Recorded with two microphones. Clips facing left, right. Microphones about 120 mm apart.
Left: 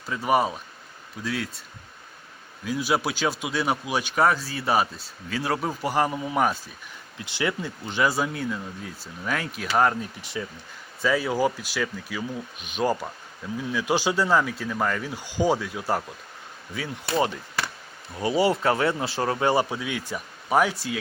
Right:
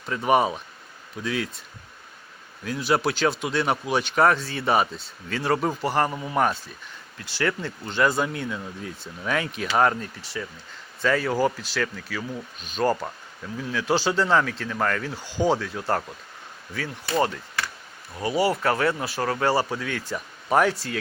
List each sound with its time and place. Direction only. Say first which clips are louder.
0.0 s speech: right 2 dB; centre (ahead or behind)
2.6 s speech: right 2 dB; 5° left (ahead or behind)
10.2 s speech: left 1 dB; 20° left (ahead or behind)
11.0 s speech: right 1 dB; 10° left (ahead or behind)
17.2 s speech: right 1 dB; 15° left (ahead or behind)
18.2 s speech: left 1 dB; 25° left (ahead or behind)